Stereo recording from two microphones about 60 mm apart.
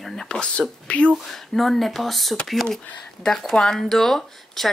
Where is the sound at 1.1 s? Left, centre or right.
Centre.